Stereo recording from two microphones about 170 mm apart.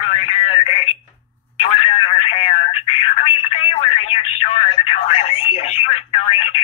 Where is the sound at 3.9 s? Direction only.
35° left (ahead or behind).